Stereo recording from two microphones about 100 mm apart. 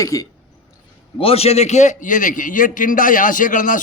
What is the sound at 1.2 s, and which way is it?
Speech, 85° left.